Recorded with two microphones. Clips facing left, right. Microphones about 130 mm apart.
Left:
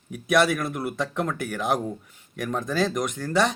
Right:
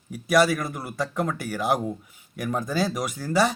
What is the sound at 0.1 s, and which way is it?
Speech, centre (ahead or behind).